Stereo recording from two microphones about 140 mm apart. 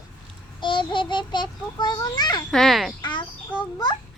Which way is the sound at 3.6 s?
30° left (ahead or behind).